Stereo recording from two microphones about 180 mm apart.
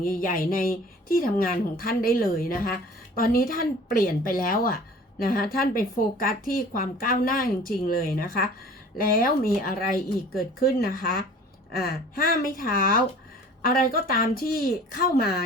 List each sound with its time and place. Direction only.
0.0 s speech: 50° left (ahead or behind)